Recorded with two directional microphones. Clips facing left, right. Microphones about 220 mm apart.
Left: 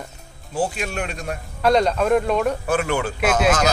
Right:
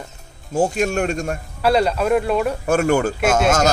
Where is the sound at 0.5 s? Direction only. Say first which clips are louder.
Right 6 dB; 45° right (ahead or behind).